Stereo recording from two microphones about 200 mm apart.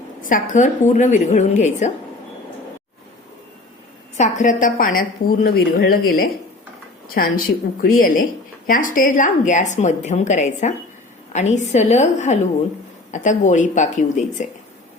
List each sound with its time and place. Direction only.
0.2 s speech: 40° left (ahead or behind)
4.2 s a woman's voice: 35° left (ahead or behind)